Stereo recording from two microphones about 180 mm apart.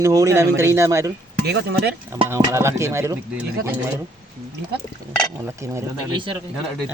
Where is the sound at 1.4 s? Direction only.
65° right (ahead or behind).